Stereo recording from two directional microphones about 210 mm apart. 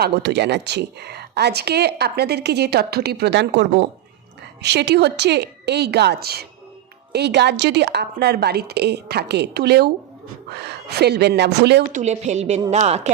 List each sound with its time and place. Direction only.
0.0 s a woman's voice: 55° right (ahead or behind)
11.9 s a woman's voice: 35° right (ahead or behind)